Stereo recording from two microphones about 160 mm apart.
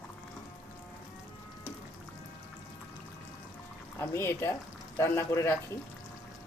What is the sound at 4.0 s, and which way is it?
Speech, 15° left (ahead or behind).